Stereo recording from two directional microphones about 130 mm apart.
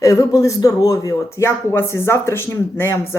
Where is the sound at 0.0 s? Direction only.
25° left (ahead or behind).